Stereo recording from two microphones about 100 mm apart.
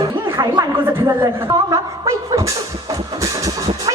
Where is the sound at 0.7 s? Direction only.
20° right (ahead or behind).